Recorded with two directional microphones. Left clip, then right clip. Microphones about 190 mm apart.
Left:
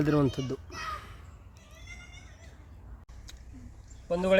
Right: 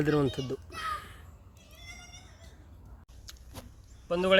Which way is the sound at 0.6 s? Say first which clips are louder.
Right 2 dB; 5° right (ahead or behind).